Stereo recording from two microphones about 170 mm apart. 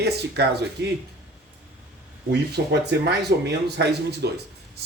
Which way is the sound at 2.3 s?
75° right (ahead or behind).